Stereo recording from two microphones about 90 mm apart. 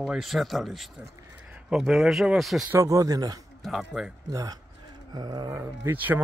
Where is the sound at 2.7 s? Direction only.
35° right (ahead or behind).